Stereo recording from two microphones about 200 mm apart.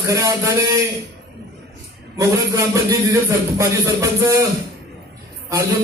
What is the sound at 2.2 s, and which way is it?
Speech, 15° right (ahead or behind).